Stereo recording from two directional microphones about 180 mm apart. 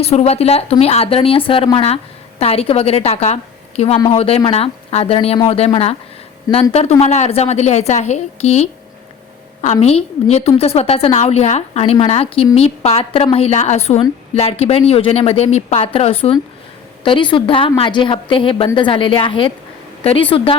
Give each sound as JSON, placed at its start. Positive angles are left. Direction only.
{"t": 0.0, "sound": "speech", "side_deg": 35}
{"t": 9.8, "sound": "a woman's voice", "side_deg": 35}